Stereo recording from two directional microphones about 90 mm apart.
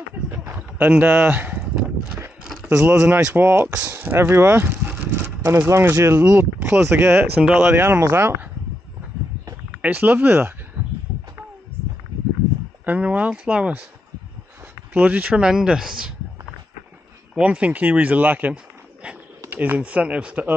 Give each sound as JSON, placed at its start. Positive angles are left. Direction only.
{"t": 0.3, "sound": "a sound", "side_deg": -20}
{"t": 3.2, "sound": "speech", "side_deg": -20}
{"t": 9.8, "sound": "speech", "side_deg": -15}
{"t": 12.8, "sound": "speech", "side_deg": -15}
{"t": 15.0, "sound": "speech", "side_deg": -20}
{"t": 17.4, "sound": "speech", "side_deg": -15}